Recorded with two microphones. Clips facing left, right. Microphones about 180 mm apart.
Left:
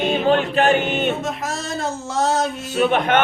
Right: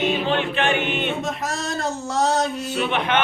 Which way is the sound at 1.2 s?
Centre (ahead or behind).